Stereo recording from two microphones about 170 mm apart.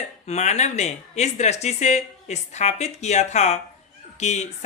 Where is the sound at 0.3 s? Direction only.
40° left (ahead or behind).